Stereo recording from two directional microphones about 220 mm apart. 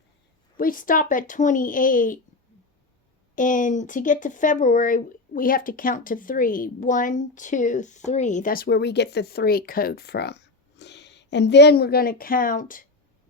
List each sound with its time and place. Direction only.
0.5 s speech: 40° left (ahead or behind)
3.3 s speech: 35° left (ahead or behind)